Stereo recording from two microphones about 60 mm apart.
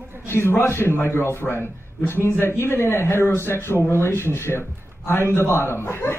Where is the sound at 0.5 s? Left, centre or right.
Left.